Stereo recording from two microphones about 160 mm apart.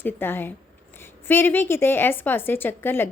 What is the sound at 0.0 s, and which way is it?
A woman's voice, 15° left (ahead or behind).